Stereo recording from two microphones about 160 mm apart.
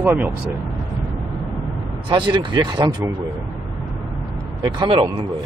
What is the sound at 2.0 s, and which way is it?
Speech, 30° right (ahead or behind).